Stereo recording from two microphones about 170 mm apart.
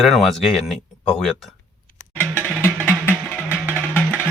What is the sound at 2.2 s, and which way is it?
Music, 10° left (ahead or behind).